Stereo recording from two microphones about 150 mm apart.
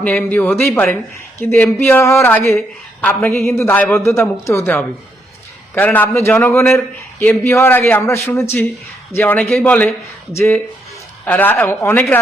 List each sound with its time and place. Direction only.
0.0 s speech: 10° left (ahead or behind)
5.7 s speech: 10° left (ahead or behind)